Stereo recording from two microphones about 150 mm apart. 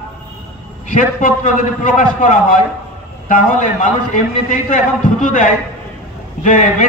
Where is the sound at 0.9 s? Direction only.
60° left (ahead or behind).